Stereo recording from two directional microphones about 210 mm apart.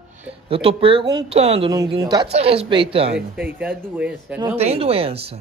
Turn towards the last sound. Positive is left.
turn(degrees=-30)  # may be behind; listen again after turning